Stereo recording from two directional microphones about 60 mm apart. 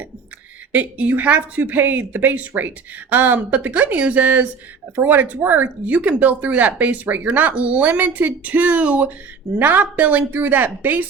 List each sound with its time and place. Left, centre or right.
0.7 s speech: right